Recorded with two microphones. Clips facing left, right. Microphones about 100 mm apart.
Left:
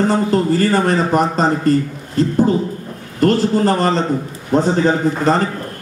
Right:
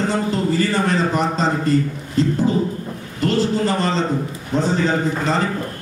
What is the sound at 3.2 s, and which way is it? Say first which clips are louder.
A man's voice: left 5 dB; 45° left (ahead or behind).